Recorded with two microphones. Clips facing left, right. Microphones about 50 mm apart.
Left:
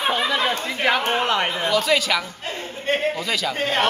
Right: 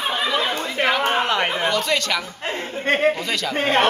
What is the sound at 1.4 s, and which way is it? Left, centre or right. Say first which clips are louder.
Speech: right 2 dB; centre.